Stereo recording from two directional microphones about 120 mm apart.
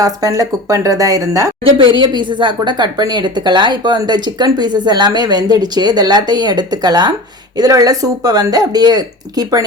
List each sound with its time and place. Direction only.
0.0 s a woman's voice: 30° right (ahead or behind)
1.8 s speech: 40° right (ahead or behind)